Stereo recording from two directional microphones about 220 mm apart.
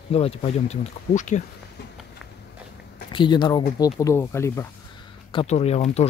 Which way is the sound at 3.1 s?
20° left (ahead or behind).